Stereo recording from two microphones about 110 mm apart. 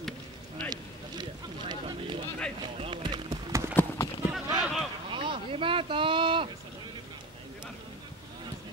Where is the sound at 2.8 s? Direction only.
50° right (ahead or behind).